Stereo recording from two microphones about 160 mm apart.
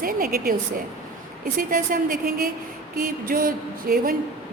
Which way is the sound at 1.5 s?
60° right (ahead or behind).